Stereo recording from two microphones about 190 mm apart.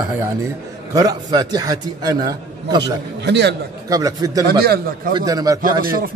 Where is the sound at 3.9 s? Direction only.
20° right (ahead or behind).